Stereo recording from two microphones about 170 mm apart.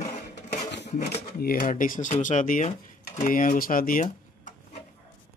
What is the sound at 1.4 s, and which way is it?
Speech, 55° left (ahead or behind).